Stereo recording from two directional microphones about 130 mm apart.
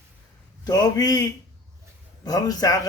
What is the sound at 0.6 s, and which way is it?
Speech, 30° left (ahead or behind).